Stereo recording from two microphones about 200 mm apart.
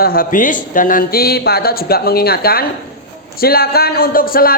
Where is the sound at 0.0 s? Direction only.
45° left (ahead or behind).